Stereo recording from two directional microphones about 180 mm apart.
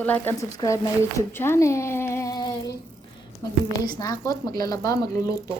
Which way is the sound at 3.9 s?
20° left (ahead or behind).